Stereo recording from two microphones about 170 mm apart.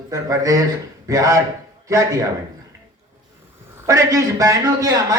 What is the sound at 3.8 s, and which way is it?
A man's voice, 20° right (ahead or behind).